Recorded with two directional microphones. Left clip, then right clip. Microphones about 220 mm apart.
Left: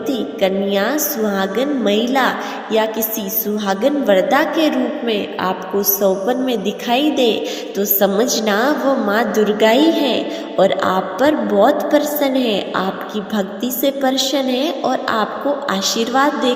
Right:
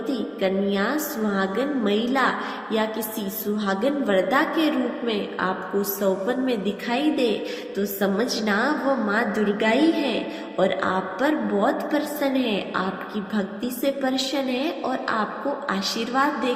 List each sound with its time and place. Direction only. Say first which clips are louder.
0.1 s a woman's voice: left 7 dB; 35° left (ahead or behind)
3.7 s a woman's voice: left 8 dB; 30° left (ahead or behind)